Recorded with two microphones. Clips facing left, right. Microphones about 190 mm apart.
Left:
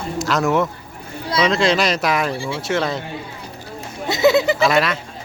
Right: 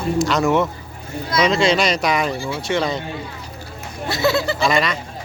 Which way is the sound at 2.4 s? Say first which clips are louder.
Even; 30° left (ahead or behind).